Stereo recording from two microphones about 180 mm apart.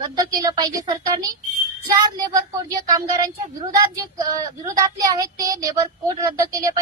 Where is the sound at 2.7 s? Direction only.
20° right (ahead or behind).